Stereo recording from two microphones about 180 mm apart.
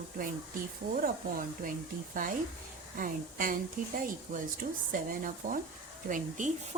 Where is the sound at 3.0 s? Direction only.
50° right (ahead or behind).